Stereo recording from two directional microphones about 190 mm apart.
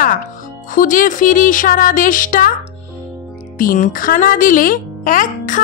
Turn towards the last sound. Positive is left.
turn(degrees=45)  # may be behind; listen again after turning